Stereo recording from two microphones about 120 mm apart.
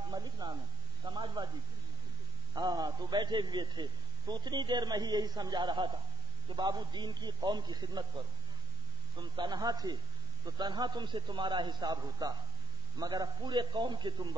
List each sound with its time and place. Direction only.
0.1 s a sound: 35° right (ahead or behind)
1.0 s a man's voice: 35° right (ahead or behind)
2.5 s a man's voice: 35° right (ahead or behind)
9.2 s a man's voice: 35° right (ahead or behind)